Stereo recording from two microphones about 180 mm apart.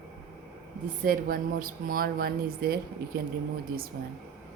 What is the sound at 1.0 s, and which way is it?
A woman's voice, 50° right (ahead or behind).